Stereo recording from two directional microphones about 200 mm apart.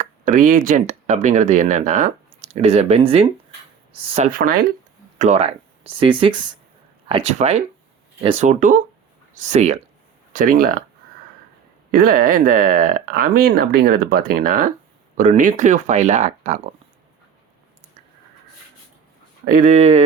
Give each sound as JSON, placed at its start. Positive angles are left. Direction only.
{"t": 0.0, "sound": "speech", "side_deg": -40}
{"t": 4.3, "sound": "speech", "side_deg": -45}
{"t": 5.1, "sound": "speech", "side_deg": -35}
{"t": 10.3, "sound": "speech", "side_deg": -45}
{"t": 11.9, "sound": "speech", "side_deg": -45}
{"t": 19.5, "sound": "speech", "side_deg": -40}